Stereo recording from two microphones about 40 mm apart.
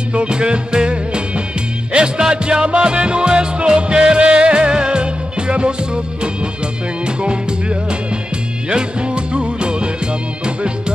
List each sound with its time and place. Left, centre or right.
0.1 s music: right
8.6 s music: right